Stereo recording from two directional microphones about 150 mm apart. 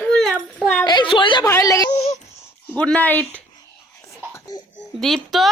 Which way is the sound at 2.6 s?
10° left (ahead or behind).